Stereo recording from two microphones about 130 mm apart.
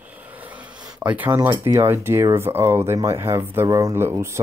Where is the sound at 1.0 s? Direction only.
10° right (ahead or behind).